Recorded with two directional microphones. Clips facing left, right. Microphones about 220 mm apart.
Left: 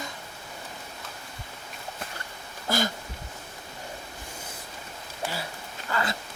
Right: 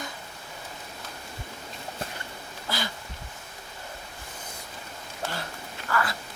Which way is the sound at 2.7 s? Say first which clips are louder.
Left 6 dB; 45° left (ahead or behind).